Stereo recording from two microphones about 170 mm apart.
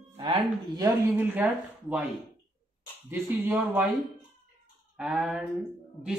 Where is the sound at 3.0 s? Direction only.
10° right (ahead or behind).